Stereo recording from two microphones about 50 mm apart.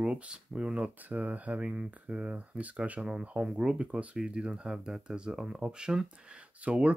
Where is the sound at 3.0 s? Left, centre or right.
Centre.